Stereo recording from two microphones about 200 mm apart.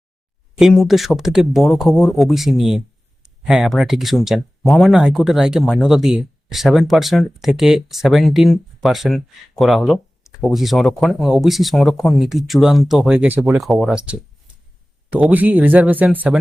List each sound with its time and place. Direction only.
0.6 s speech: centre (ahead or behind)